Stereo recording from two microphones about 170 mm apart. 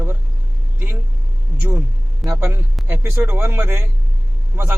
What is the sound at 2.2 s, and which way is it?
A man's voice, 15° right (ahead or behind).